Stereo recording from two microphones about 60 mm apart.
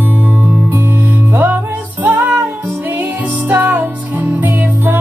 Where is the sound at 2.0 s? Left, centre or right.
Right.